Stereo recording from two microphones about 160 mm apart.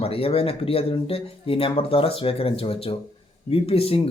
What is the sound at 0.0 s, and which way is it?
Speech, 35° left (ahead or behind).